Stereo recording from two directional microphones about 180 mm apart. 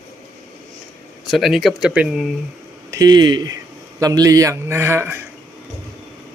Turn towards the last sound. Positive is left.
turn(degrees=-15)  # may be behind; listen again after turning